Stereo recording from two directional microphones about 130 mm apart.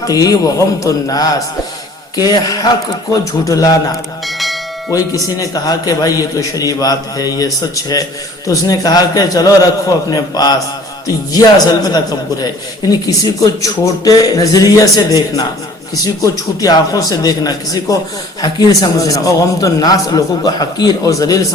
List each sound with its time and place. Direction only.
0.0 s a man's voice: 30° left (ahead or behind)
4.3 s bell: centre (ahead or behind)
4.9 s a man's voice: 25° left (ahead or behind)